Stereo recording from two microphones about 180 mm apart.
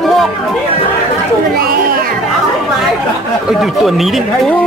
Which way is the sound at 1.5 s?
55° right (ahead or behind).